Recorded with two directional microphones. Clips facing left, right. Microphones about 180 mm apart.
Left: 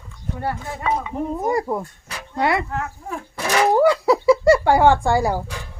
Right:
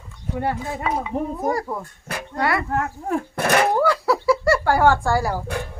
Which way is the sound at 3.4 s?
55° right (ahead or behind).